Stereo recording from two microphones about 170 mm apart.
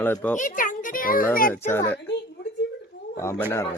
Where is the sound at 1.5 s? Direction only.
15° left (ahead or behind).